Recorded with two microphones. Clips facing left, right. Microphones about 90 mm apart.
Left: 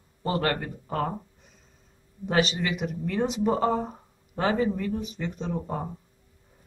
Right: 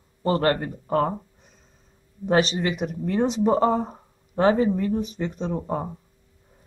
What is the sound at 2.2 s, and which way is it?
Speech, 35° right (ahead or behind).